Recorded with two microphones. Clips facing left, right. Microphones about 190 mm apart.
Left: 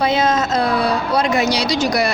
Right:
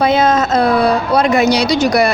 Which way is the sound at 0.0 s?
55° right (ahead or behind).